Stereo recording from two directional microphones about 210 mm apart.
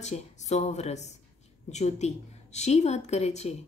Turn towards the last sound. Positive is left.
turn(degrees=30)  # may be behind; listen again after turning